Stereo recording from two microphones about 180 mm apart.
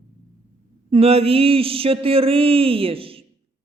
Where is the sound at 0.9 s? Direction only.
35° right (ahead or behind).